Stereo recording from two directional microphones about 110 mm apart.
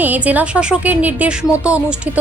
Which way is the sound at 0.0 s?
15° right (ahead or behind).